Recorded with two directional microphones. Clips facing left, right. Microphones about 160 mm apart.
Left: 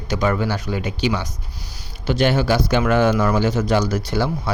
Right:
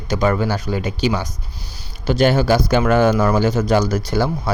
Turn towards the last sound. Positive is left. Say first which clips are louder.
# right 2 dB
turn(degrees=-40)  # may be behind; listen again after turning